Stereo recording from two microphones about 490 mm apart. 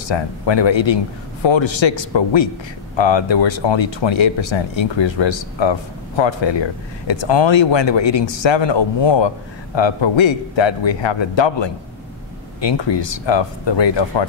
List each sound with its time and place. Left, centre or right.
0.1 s speech: left